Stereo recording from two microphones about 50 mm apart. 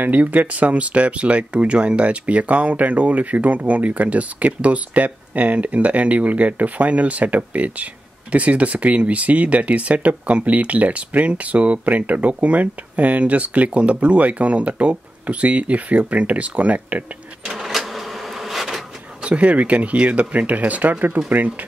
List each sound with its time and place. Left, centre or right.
0.0 s speech: right
17.6 s bee: centre
19.2 s speech: right